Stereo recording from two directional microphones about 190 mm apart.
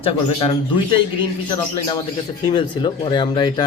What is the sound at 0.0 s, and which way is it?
Speech, 30° left (ahead or behind).